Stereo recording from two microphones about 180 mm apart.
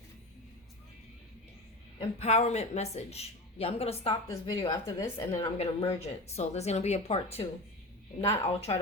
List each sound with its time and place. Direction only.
2.0 s speech: 35° left (ahead or behind)
4.1 s a woman's voice: 20° left (ahead or behind)
5.4 s speech: 35° left (ahead or behind)
8.4 s speech: 35° left (ahead or behind)